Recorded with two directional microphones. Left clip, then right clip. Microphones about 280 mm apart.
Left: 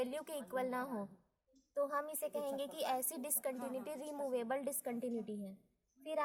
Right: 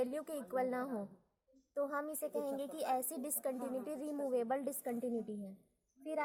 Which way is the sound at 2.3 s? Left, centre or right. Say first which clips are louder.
Right 1 dB; left.